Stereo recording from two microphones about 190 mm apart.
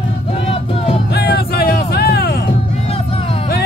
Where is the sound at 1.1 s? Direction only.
55° left (ahead or behind).